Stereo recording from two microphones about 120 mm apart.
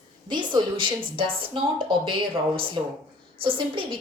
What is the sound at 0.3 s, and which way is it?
Speech, 40° right (ahead or behind).